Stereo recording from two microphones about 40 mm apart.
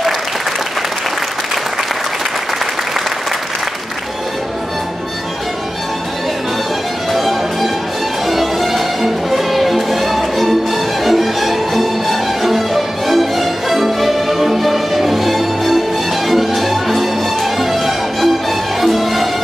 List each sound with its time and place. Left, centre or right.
7.1 s music: centre